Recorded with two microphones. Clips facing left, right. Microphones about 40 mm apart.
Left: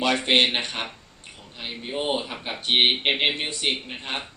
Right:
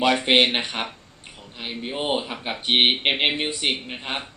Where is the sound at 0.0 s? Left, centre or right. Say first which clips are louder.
Right 2 dB; centre.